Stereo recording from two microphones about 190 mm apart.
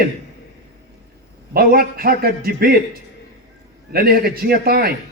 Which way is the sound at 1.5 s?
50° right (ahead or behind).